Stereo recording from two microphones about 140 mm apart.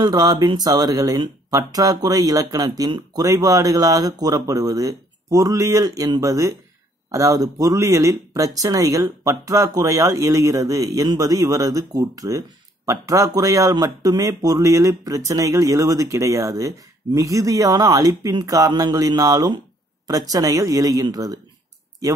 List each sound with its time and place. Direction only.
0.0 s speech: 25° right (ahead or behind)